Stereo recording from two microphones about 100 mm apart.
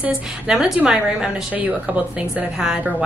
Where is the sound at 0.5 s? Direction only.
5° right (ahead or behind).